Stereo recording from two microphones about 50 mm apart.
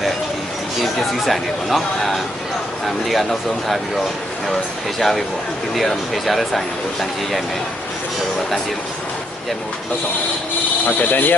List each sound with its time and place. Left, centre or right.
1.2 s speech: centre
10.8 s speech: left